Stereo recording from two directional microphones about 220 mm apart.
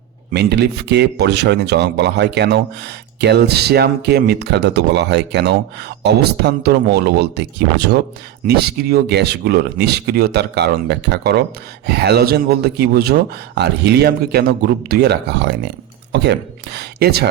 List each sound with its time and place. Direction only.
0.3 s speech: 50° right (ahead or behind)